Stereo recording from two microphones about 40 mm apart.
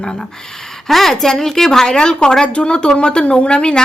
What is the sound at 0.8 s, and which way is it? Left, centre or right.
A woman's voice, centre.